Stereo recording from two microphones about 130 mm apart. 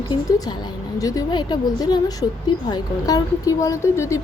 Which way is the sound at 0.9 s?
25° left (ahead or behind).